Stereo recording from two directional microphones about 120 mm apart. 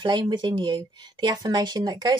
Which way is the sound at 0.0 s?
40° right (ahead or behind).